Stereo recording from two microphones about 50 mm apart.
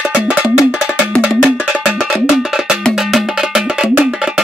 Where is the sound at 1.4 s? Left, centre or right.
Centre.